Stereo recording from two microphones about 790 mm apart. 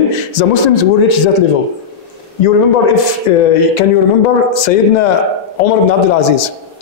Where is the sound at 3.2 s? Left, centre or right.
Left.